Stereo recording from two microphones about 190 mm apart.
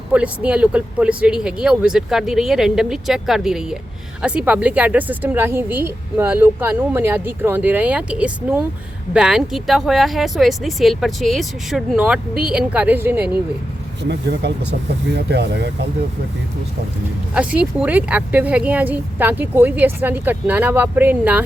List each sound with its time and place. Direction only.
0.1 s a woman's voice: 5° right (ahead or behind)
14.1 s speech: 60° right (ahead or behind)
17.3 s a woman's voice: 5° right (ahead or behind)